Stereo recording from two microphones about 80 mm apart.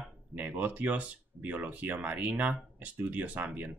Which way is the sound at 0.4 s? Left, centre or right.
Centre.